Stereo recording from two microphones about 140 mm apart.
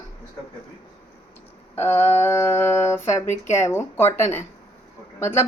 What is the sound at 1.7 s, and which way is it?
Speech, 15° left (ahead or behind).